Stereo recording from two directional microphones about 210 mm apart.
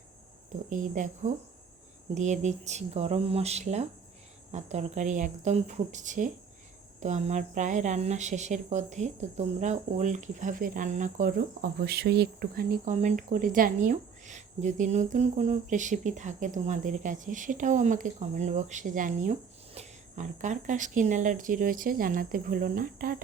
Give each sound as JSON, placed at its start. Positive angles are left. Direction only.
{"t": 0.7, "sound": "speech", "side_deg": -40}